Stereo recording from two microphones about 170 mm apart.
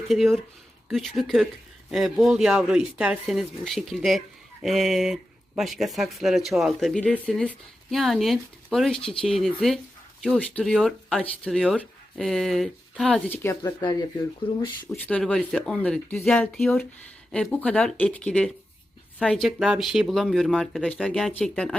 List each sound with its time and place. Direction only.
0.1 s speech: centre (ahead or behind); by 13.7 s 15° left (ahead or behind)
15.0 s speech: 5° left (ahead or behind)